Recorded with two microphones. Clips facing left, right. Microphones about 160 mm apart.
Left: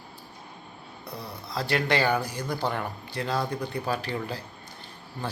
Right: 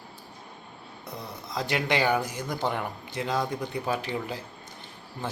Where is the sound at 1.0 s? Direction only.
20° right (ahead or behind).